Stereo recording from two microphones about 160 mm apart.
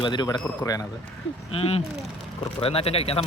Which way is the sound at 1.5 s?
40° left (ahead or behind).